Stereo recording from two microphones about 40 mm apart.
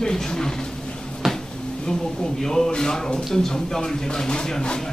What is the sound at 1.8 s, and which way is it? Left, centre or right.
Speech, centre.